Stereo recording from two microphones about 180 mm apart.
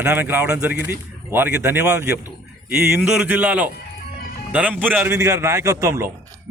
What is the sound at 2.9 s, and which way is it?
A man's voice, 5° right (ahead or behind).